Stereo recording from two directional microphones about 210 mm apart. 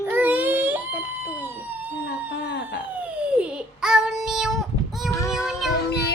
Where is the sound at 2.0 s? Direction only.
55° left (ahead or behind).